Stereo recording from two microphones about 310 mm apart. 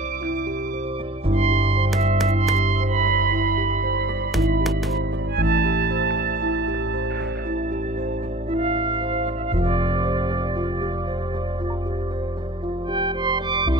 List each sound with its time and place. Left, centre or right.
1.3 s music: right
5.4 s music: right
8.5 s music: centre
12.9 s music: centre